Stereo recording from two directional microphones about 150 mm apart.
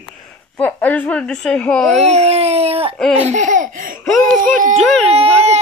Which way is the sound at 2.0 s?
45° right (ahead or behind).